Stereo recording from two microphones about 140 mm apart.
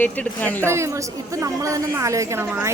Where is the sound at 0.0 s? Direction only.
10° left (ahead or behind).